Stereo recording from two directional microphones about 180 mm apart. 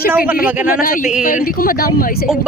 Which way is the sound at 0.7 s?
50° left (ahead or behind).